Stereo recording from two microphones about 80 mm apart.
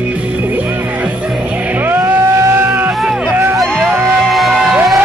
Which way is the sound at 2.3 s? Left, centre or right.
Right.